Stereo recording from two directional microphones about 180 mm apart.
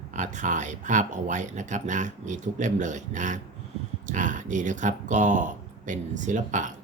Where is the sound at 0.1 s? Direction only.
45° right (ahead or behind).